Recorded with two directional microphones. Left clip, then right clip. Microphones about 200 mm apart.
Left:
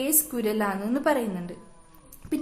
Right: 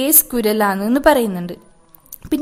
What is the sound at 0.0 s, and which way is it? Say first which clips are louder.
A woman's voice: right 9 dB; 45° right (ahead or behind).